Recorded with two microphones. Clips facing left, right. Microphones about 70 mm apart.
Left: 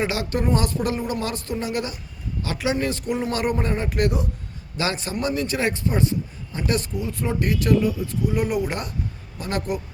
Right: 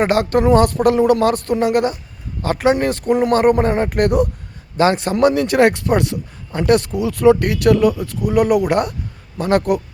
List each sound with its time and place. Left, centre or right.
0.0 s speech: right
5.1 s speech: right